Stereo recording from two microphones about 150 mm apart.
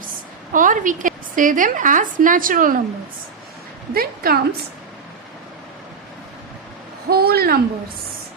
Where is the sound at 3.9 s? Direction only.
90° right.